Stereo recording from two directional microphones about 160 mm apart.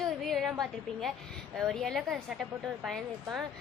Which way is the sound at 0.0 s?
Centre (ahead or behind).